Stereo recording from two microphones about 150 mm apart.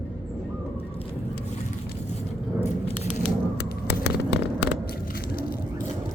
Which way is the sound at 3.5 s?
90° left.